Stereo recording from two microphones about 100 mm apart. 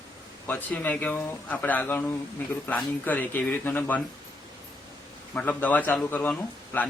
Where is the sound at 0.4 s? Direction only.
15° left (ahead or behind).